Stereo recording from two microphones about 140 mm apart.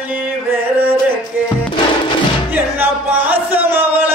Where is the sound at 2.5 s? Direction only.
15° right (ahead or behind).